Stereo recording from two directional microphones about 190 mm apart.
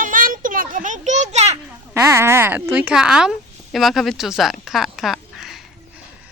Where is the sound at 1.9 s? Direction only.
15° right (ahead or behind).